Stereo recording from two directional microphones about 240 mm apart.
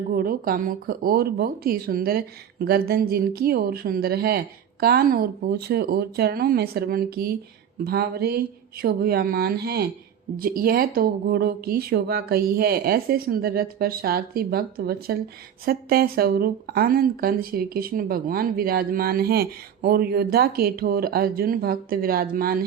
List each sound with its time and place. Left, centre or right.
0.1 s speech: right